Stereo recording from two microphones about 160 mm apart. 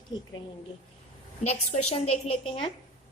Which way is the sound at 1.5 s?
40° left (ahead or behind).